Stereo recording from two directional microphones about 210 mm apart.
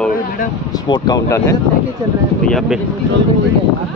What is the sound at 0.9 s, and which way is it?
Speech, 20° left (ahead or behind).